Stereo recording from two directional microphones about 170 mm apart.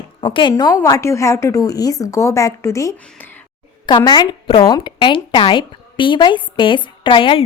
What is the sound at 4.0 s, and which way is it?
Speech, 25° left (ahead or behind).